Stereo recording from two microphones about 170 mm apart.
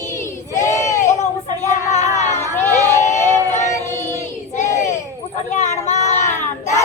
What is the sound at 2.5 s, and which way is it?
Crowd, 10° left (ahead or behind).